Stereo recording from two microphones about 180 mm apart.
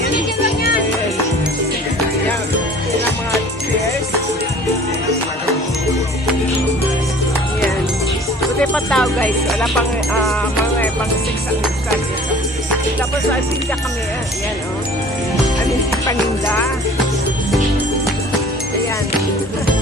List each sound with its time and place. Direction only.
8.6 s music: 5° left (ahead or behind)
16.0 s music: 15° left (ahead or behind)